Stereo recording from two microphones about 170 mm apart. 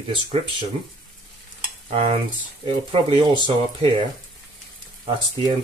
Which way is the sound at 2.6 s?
30° right (ahead or behind).